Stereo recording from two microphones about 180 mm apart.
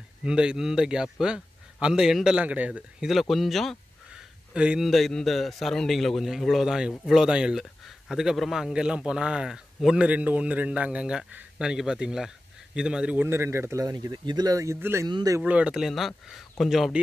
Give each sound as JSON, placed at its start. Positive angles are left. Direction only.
{"t": 0.2, "sound": "a man's voice", "side_deg": -5}
{"t": 15.4, "sound": "a man's voice", "side_deg": -5}